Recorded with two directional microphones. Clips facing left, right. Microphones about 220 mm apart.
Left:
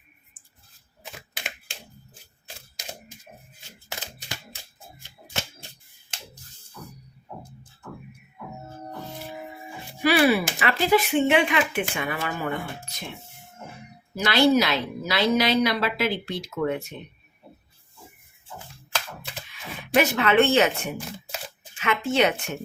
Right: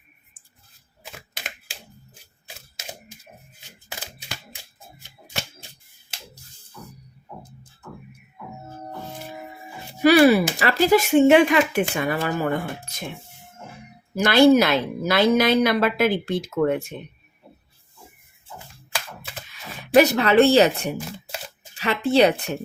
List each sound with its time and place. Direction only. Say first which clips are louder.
6.1 s a sound: even; 5° right (ahead or behind)
10.0 s a woman's voice: right 6 dB; 40° right (ahead or behind)
14.2 s a woman's voice: right 5 dB; 50° right (ahead or behind)
19.8 s speech: right 5 dB; 40° right (ahead or behind)